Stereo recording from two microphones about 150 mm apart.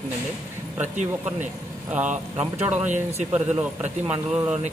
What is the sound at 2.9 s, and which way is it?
Speech, 45° right (ahead or behind).